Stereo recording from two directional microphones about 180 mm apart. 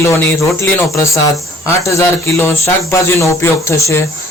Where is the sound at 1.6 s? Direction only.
15° left (ahead or behind).